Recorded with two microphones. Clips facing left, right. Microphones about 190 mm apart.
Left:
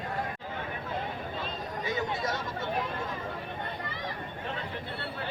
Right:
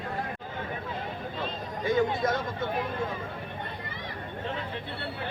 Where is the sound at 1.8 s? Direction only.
55° right (ahead or behind).